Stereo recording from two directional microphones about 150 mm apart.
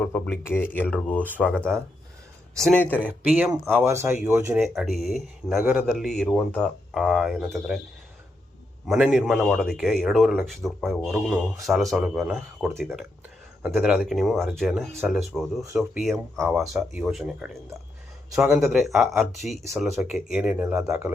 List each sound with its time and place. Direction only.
0.0 s speech: 10° left (ahead or behind)
3.2 s speech: 10° right (ahead or behind)
4.5 s speech: centre (ahead or behind)
8.9 s speech: 5° right (ahead or behind)